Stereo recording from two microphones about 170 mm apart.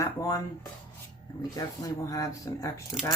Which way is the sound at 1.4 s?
20° left (ahead or behind).